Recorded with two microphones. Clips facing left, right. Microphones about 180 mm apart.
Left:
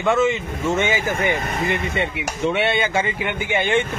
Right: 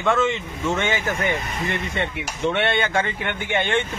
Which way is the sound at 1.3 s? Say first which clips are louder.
Left 3 dB; 55° left (ahead or behind).